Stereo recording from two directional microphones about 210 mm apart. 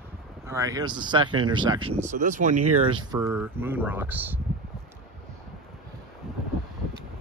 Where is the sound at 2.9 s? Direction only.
20° right (ahead or behind).